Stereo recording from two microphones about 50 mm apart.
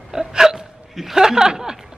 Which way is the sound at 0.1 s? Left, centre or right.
Centre.